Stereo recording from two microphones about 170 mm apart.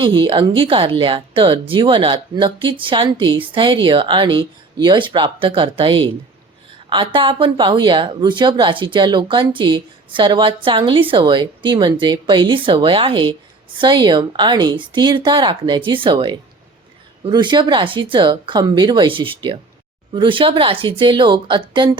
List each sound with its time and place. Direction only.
0.0 s a woman's voice: 30° right (ahead or behind)